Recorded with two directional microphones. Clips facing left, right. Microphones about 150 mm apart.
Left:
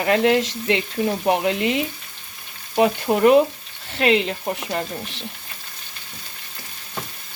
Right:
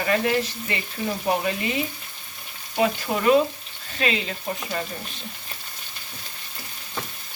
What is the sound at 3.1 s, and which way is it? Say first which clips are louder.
Speech: left 6 dB; 50° left (ahead or behind).